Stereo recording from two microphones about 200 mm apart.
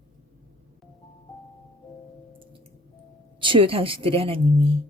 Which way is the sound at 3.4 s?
25° right (ahead or behind).